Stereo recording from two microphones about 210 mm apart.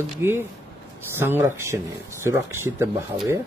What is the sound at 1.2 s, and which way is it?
Speech, 10° right (ahead or behind).